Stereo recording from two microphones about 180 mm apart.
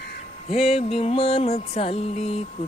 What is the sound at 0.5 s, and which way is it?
Music, 35° left (ahead or behind).